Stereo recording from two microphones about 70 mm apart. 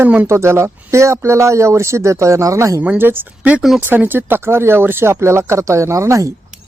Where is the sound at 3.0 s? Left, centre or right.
Right.